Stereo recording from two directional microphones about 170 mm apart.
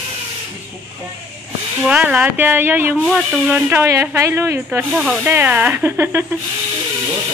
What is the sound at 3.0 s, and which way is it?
Speech, centre (ahead or behind).